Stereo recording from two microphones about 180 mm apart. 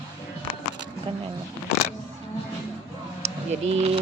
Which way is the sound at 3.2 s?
35° right (ahead or behind).